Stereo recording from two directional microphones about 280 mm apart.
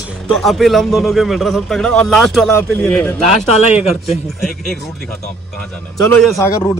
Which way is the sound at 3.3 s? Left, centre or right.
Left.